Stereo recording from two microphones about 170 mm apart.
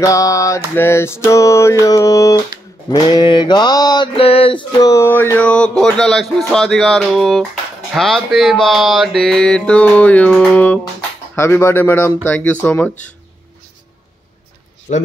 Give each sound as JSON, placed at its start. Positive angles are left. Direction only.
{"t": 0.0, "sound": "mantra", "side_deg": 20}
{"t": 14.9, "sound": "speech", "side_deg": 45}